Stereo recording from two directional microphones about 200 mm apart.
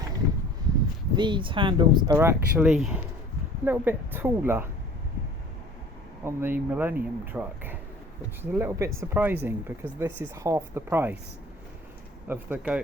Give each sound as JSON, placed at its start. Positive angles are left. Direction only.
{"t": 1.1, "sound": "speech", "side_deg": -25}
{"t": 2.1, "sound": "speech", "side_deg": -10}
{"t": 6.2, "sound": "speech", "side_deg": -10}
{"t": 12.3, "sound": "speech", "side_deg": -10}